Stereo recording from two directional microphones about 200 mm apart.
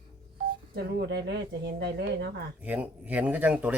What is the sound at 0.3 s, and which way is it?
Speech, 50° right (ahead or behind).